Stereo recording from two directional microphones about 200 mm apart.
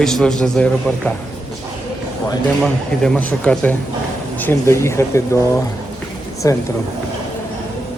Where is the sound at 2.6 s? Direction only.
5° left (ahead or behind).